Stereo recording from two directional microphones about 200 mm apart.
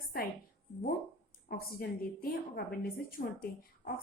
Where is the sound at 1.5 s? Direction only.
50° left (ahead or behind).